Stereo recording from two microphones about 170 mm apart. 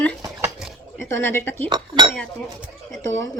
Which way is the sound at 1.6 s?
30° right (ahead or behind).